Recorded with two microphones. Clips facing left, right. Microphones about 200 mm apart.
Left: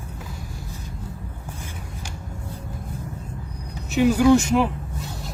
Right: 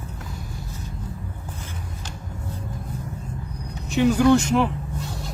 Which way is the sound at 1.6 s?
10° left (ahead or behind).